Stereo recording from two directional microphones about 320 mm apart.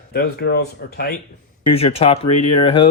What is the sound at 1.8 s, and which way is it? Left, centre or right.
Speech, centre.